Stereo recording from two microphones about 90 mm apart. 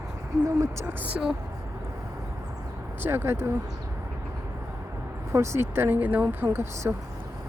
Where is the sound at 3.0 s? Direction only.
25° right (ahead or behind).